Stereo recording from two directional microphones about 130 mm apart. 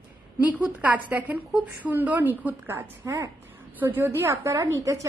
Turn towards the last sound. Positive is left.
turn(degrees=-25)  # may be behind; listen again after turning